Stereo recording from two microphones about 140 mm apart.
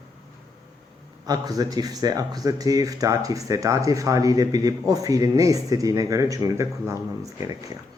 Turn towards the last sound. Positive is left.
turn(degrees=-20)  # may be behind; listen again after turning